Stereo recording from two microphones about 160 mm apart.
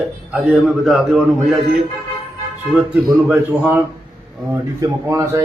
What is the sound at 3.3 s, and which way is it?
Speech, 10° right (ahead or behind).